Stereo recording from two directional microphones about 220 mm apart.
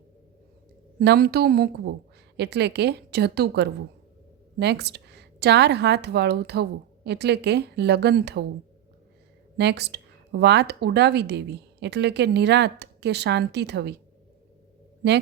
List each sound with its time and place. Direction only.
0.9 s speech: 45° right (ahead or behind)
9.6 s speech: 50° right (ahead or behind)
15.0 s speech: 45° right (ahead or behind)